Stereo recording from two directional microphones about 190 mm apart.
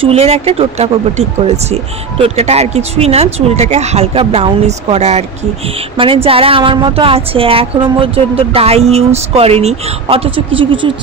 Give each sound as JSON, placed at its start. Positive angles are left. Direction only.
{"t": 0.0, "sound": "speech", "side_deg": -30}